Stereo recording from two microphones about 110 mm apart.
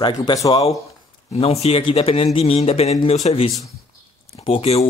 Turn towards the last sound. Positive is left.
turn(degrees=70)  # may be behind; listen again after turning